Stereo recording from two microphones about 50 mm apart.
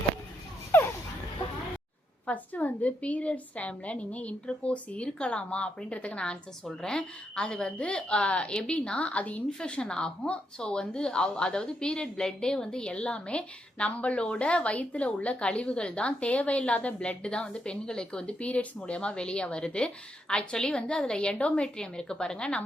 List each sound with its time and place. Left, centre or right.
2.2 s speech: left
9.5 s a woman's voice: centre